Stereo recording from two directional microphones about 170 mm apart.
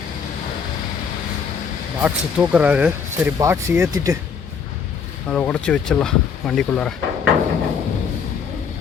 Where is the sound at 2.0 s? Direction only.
5° right (ahead or behind).